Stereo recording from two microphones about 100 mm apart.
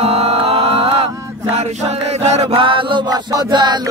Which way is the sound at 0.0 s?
90° right.